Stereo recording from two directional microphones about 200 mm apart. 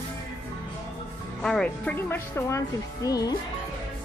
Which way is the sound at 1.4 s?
5° left (ahead or behind).